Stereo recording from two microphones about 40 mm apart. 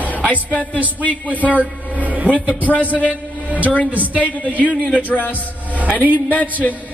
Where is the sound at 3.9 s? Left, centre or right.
Right.